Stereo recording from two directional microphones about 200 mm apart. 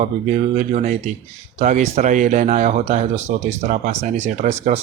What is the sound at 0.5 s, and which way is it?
Speech, 35° right (ahead or behind).